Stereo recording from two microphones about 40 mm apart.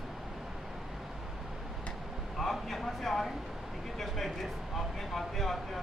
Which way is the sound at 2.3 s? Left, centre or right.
Centre.